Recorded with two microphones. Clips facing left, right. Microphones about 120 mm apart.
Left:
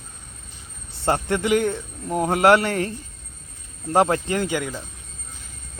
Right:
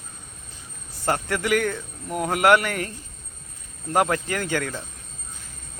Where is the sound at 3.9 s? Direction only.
25° left (ahead or behind).